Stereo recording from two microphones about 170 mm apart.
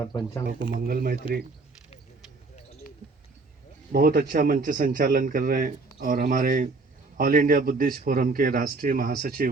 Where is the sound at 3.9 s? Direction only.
60° right (ahead or behind).